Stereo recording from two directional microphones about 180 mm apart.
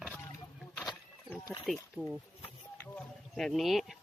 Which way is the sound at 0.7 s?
20° left (ahead or behind).